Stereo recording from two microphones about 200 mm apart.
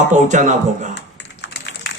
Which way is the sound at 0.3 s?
40° right (ahead or behind).